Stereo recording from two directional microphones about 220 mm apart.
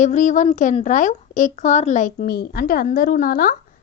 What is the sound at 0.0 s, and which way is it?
Speech, 35° left (ahead or behind).